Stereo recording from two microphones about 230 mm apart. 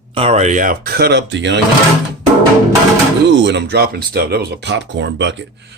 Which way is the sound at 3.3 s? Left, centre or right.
Right.